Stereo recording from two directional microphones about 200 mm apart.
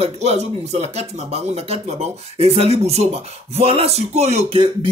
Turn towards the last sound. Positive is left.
turn(degrees=-30)  # may be behind; listen again after turning